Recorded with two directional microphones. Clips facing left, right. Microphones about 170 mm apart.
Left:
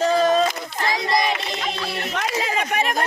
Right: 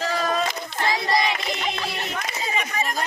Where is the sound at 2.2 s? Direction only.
75° left (ahead or behind).